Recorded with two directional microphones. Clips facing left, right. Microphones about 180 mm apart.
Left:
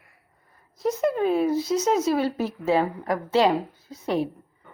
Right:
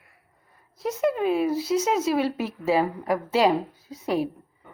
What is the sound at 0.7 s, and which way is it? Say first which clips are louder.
A woman's voice: left 1 dB; centre (ahead or behind).